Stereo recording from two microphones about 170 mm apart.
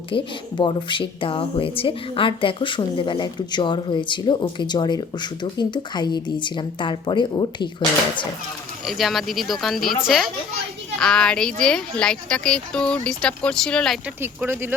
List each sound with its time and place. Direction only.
0.1 s speech: 30° left (ahead or behind)
8.9 s speech: centre (ahead or behind)
14.2 s speech: 15° right (ahead or behind)